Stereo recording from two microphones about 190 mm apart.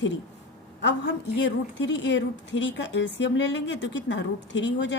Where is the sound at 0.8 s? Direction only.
65° left (ahead or behind).